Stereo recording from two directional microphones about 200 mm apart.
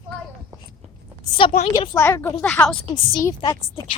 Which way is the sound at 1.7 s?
15° left (ahead or behind).